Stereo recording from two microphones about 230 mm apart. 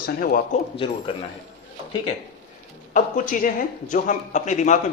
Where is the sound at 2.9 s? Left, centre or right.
Left.